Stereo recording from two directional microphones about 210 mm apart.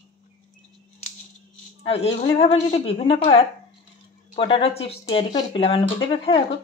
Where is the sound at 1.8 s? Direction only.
30° left (ahead or behind).